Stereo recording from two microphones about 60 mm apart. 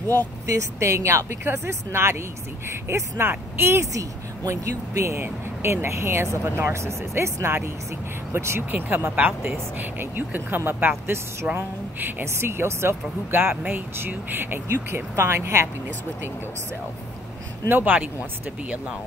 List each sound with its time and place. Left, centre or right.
0.5 s speech: right
3.8 s speech: right
8.7 s speech: right
12.3 s speech: right
17.6 s speech: right